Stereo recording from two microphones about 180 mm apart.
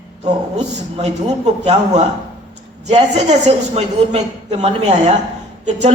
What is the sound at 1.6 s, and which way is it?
Speech, 40° right (ahead or behind).